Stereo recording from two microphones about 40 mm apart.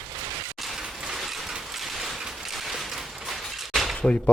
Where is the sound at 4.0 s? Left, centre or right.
Left.